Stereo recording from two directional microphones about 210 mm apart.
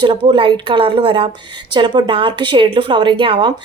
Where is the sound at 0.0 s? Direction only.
25° right (ahead or behind).